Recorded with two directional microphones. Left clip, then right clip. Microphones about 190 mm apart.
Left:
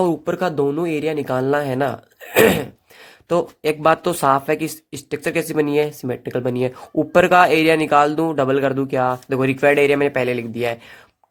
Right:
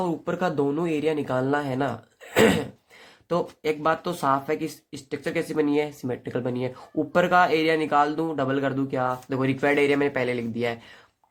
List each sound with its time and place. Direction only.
0.0 s speech: 35° left (ahead or behind)